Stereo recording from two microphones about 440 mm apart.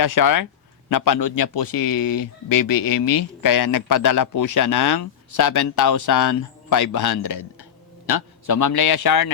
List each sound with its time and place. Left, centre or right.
0.0 s speech: left
1.4 s a man's voice: left